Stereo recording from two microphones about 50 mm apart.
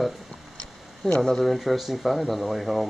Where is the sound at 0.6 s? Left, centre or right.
Left.